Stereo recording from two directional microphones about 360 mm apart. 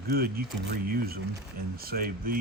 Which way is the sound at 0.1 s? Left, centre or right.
Right.